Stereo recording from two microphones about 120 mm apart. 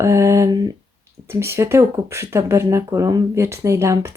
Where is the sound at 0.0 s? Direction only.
25° right (ahead or behind).